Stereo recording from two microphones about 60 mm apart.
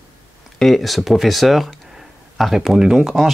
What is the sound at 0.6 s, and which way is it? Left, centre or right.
Speech, centre.